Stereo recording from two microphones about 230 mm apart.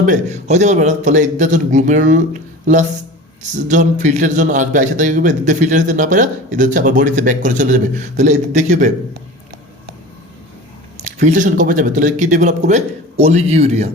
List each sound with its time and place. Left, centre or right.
0.0 s a man's voice: right
3.5 s a man's voice: right
10.9 s a man's voice: right